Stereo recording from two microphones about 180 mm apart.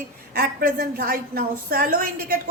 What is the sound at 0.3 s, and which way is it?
A woman's voice, 60° right (ahead or behind).